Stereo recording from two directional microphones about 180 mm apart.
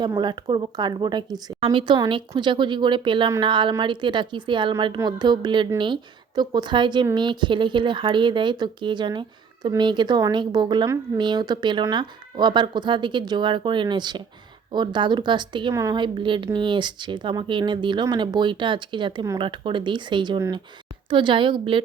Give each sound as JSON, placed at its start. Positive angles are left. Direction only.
{"t": 0.0, "sound": "a woman's voice", "side_deg": -25}